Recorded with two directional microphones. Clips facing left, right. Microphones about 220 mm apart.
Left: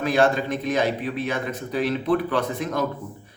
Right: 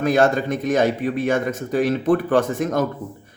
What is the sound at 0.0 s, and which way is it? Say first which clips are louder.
A man's voice: right 3 dB; 45° right (ahead or behind).